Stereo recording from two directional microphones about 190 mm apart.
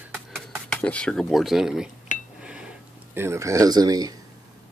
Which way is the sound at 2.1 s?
40° left (ahead or behind).